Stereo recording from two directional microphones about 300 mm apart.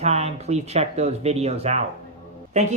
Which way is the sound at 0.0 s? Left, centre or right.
Right.